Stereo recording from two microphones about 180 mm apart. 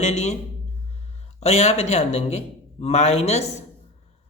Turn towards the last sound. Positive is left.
turn(degrees=35)  # may be behind; listen again after turning